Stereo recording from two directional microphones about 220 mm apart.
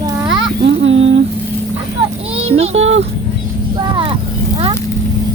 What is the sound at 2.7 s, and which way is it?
Speech, 60° right (ahead or behind).